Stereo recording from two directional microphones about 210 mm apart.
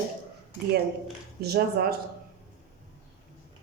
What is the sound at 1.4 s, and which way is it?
Speech, 50° right (ahead or behind).